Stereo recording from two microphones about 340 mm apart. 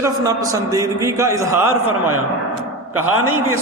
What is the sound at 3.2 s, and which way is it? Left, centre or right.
Speech, right.